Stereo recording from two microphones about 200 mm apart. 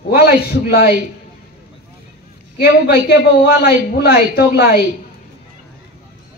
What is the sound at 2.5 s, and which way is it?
A woman's voice, 50° left (ahead or behind).